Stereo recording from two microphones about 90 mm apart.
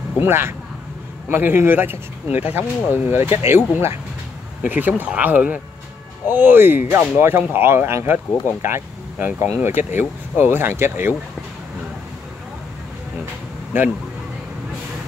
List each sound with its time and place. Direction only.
0.2 s speech: 25° right (ahead or behind)
4.6 s speech: 20° right (ahead or behind)
13.7 s speech: 20° right (ahead or behind)